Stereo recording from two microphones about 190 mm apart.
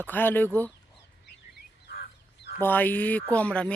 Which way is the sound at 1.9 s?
60° left (ahead or behind).